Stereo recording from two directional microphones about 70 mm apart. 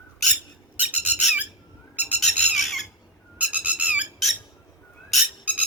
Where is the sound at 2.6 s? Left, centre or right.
Centre.